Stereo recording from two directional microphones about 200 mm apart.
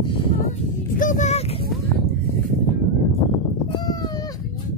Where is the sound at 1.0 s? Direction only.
40° left (ahead or behind).